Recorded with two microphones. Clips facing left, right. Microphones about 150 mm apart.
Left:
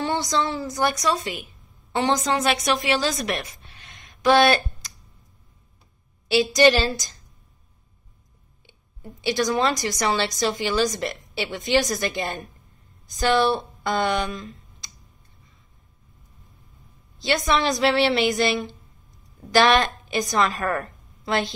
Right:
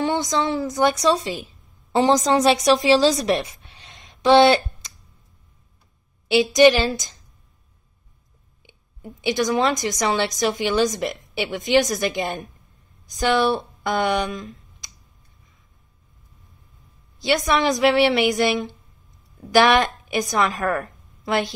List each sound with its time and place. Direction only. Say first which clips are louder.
0.0 s speech: right 2 dB; 20° right (ahead or behind)
3.4 s a sound: even; centre (ahead or behind)
4.0 s a sound: right 4 dB; 25° right (ahead or behind)
6.2 s a woman's voice: right 3 dB; 20° right (ahead or behind)
8.6 s a woman's voice: right 3 dB; 15° right (ahead or behind)
17.2 s a woman's voice: right 2 dB; 15° right (ahead or behind)
19.4 s a woman's voice: right 2 dB; 15° right (ahead or behind)